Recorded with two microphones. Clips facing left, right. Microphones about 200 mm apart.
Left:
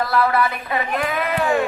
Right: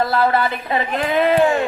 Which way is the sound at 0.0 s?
25° right (ahead or behind).